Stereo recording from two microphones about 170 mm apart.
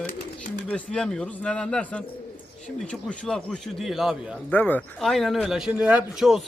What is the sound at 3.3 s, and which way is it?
Speech, centre (ahead or behind).